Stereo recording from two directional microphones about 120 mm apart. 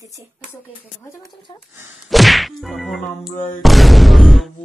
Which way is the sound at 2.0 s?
Centre (ahead or behind).